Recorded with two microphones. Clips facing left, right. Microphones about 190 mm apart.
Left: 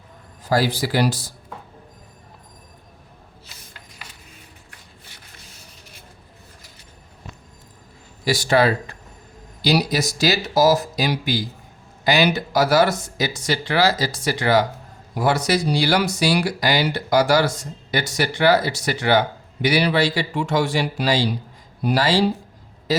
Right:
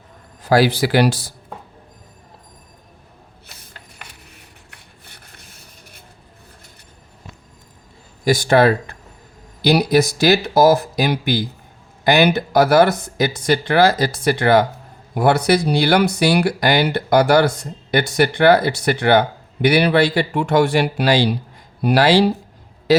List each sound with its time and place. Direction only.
0.4 s speech: 70° right (ahead or behind)
3.9 s a sound: 65° right (ahead or behind)
8.2 s a man's voice: 50° right (ahead or behind); by 23.0 s 70° right (ahead or behind)